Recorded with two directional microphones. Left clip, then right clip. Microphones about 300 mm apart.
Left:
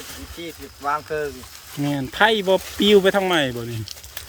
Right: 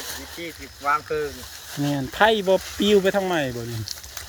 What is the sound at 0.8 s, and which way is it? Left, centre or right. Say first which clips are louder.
Speech: right 1 dB; left.